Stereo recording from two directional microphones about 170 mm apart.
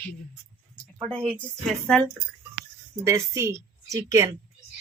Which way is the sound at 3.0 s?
15° right (ahead or behind).